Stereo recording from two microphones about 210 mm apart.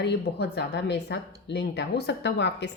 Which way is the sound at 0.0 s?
55° left (ahead or behind).